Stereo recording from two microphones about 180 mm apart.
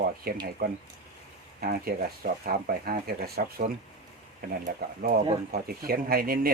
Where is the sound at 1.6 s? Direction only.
55° right (ahead or behind).